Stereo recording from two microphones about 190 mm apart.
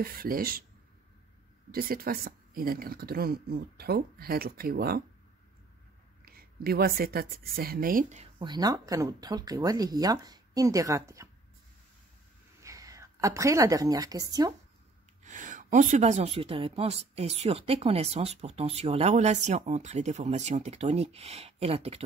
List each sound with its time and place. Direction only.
0.0 s speech: 50° right (ahead or behind)
1.7 s speech: 50° right (ahead or behind)
6.2 s speech: 55° right (ahead or behind)
8.4 s speech: 20° right (ahead or behind)
12.6 s a woman's voice: 15° right (ahead or behind)
15.2 s speech: 40° right (ahead or behind)